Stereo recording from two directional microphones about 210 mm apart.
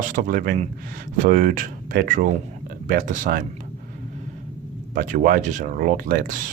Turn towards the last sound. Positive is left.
turn(degrees=-40)  # may be behind; listen again after turning